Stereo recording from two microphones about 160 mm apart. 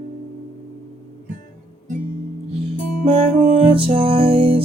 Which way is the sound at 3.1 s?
35° right (ahead or behind).